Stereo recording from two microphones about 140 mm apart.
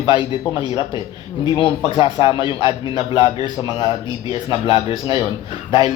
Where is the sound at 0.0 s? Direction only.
40° left (ahead or behind).